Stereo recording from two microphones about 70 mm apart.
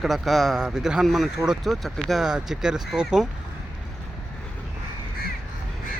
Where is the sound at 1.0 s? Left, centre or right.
Centre.